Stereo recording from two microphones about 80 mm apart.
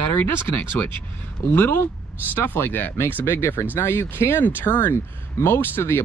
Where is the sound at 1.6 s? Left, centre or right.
Left.